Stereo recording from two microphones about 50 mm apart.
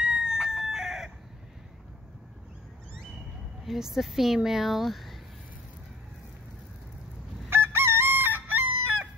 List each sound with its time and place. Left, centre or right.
0.0 s chicken: centre
3.6 s speech: centre
7.4 s chicken: right